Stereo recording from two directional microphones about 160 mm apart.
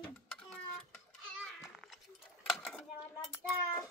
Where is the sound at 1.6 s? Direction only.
Centre (ahead or behind).